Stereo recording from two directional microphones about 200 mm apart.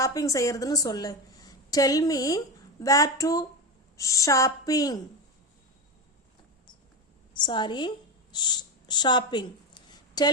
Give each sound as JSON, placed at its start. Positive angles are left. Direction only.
{"t": 0.0, "sound": "a woman's voice", "side_deg": 15}
{"t": 7.3, "sound": "speech", "side_deg": 20}